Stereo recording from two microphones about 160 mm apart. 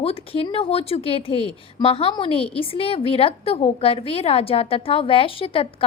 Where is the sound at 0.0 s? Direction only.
35° left (ahead or behind).